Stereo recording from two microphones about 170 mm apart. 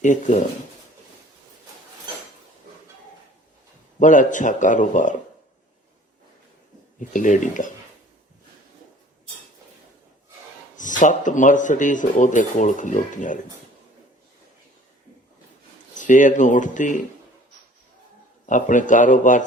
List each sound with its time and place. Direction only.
0.0 s speech: 45° left (ahead or behind)
4.0 s speech: 50° left (ahead or behind)
7.0 s speech: 50° left (ahead or behind)
10.8 s speech: 50° left (ahead or behind)
16.0 s speech: 50° left (ahead or behind)
18.4 s speech: 50° left (ahead or behind)